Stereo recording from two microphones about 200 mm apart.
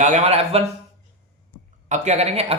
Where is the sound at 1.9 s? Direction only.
35° right (ahead or behind).